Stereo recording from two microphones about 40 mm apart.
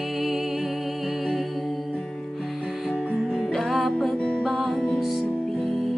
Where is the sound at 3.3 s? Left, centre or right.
Centre.